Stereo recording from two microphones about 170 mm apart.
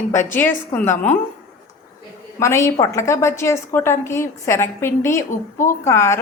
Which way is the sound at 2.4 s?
15° left (ahead or behind).